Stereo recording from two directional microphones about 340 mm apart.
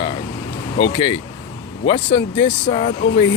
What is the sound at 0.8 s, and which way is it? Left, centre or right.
Speech, centre.